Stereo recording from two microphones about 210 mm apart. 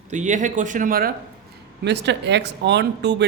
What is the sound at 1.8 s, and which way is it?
Speech, 55° right (ahead or behind).